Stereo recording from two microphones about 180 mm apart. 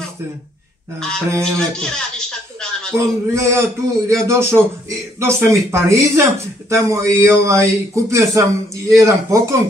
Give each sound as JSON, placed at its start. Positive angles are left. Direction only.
{"t": 0.9, "sound": "speech", "side_deg": 5}
{"t": 2.9, "sound": "a man's voice", "side_deg": -15}